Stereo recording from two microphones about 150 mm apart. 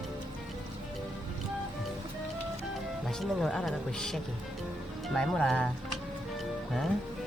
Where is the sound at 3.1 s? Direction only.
5° left (ahead or behind).